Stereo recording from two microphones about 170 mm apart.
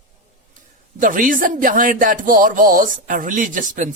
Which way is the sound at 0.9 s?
50° right (ahead or behind).